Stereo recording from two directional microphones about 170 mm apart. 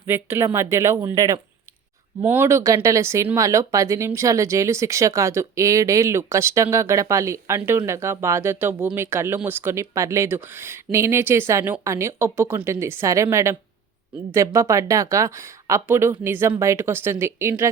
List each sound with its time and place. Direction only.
0.0 s speech: 15° right (ahead or behind)